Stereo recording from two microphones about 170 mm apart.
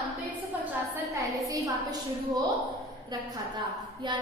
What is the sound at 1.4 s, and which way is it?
Speech, 20° right (ahead or behind).